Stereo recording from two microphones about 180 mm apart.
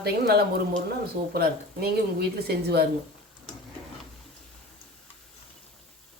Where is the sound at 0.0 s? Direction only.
60° right (ahead or behind).